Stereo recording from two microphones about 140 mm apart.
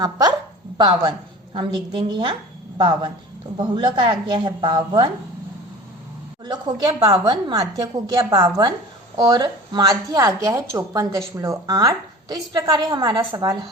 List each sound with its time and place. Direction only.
0.0 s a woman's voice: 30° right (ahead or behind)
6.4 s a woman's voice: 30° right (ahead or behind)